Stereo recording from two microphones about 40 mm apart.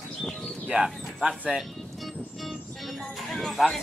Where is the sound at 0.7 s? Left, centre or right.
Right.